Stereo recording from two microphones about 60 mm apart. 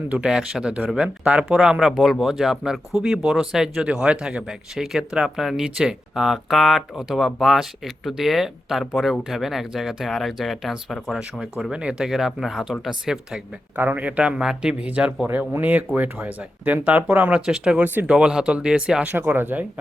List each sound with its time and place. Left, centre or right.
0.1 s speech: centre
11.2 s speech: centre
13.7 s speech: right; by 14.8 s centre
14.8 s speech: right
19.1 s speech: right